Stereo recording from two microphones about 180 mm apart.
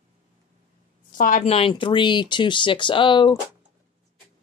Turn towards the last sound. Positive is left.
turn(degrees=25)  # may be behind; listen again after turning